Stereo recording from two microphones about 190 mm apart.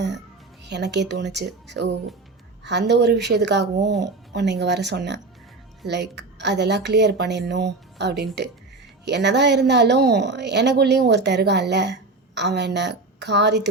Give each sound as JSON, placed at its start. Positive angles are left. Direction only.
{"t": 0.6, "sound": "a woman's voice", "side_deg": -65}